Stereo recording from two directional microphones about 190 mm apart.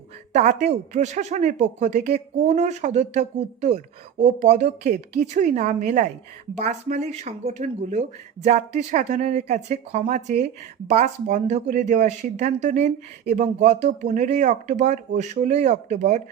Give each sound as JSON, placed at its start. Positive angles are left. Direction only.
{"t": 0.3, "sound": "speech", "side_deg": -40}